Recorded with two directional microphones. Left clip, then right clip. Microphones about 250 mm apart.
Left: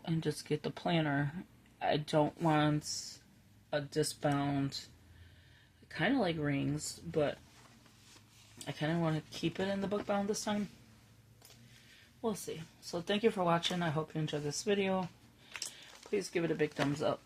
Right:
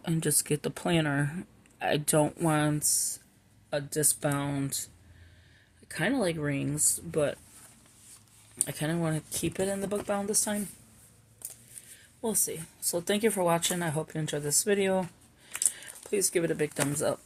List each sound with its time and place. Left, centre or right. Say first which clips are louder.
0.0 s speech: right 7 dB; right
5.9 s speech: right 4 dB; right
8.5 s speech: right 4 dB; right
12.2 s speech: right 6 dB; right
16.0 s speech: right 6 dB; right